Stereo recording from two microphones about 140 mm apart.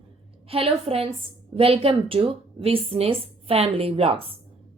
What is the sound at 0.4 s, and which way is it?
A woman's voice, 45° right (ahead or behind).